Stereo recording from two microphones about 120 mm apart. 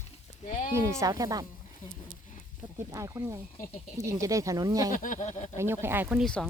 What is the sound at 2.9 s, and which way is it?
Speech, 25° right (ahead or behind).